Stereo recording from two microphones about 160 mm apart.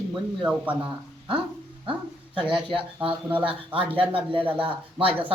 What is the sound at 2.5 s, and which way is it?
A man's voice, 30° right (ahead or behind).